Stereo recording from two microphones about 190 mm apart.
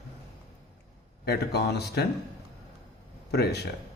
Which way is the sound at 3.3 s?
60° left (ahead or behind).